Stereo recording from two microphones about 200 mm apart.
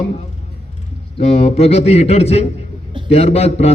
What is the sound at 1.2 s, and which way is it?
A man's voice, 30° left (ahead or behind).